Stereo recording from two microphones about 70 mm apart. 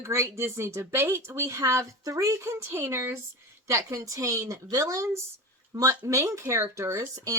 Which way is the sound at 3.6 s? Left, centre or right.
Right.